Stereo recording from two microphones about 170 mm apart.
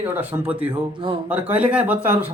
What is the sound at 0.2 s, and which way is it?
Speech, 10° right (ahead or behind).